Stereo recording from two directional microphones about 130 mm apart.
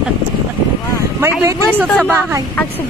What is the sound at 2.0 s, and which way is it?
Speech, 15° right (ahead or behind).